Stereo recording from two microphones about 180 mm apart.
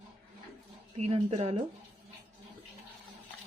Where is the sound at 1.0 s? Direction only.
35° right (ahead or behind).